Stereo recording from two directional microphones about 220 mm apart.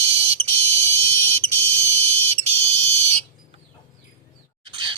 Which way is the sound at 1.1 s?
30° right (ahead or behind).